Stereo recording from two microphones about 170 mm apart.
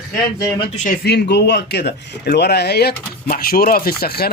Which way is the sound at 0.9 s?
75° left (ahead or behind).